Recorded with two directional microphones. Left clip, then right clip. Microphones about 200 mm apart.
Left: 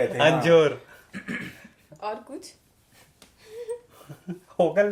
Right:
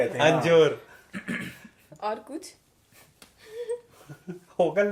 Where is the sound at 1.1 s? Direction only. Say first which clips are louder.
Even; 25° left (ahead or behind).